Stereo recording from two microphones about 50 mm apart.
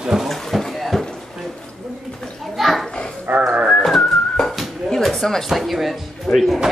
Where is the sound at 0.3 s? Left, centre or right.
Centre.